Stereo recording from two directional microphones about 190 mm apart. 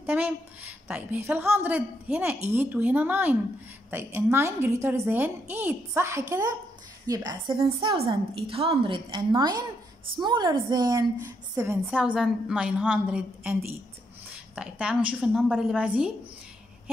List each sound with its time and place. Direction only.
0.0 s a woman's voice: 10° right (ahead or behind)
12.0 s a woman's voice: 5° right (ahead or behind)